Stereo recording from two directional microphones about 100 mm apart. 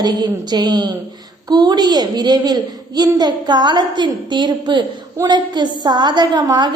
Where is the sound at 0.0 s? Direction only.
40° right (ahead or behind).